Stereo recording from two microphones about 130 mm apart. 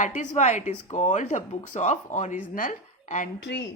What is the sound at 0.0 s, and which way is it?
Speech, 70° left (ahead or behind).